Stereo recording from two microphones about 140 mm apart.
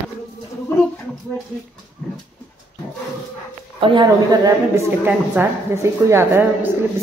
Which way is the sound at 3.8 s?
35° right (ahead or behind).